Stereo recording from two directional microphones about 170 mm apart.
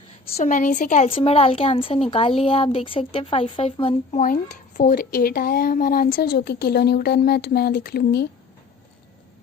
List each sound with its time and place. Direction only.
0.3 s a woman's voice: 50° left (ahead or behind)
1.1 s speech: 35° left (ahead or behind)
4.1 s speech: 50° left (ahead or behind); by 8.3 s 75° left (ahead or behind)